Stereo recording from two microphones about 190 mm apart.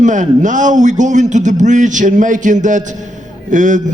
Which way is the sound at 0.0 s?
40° right (ahead or behind).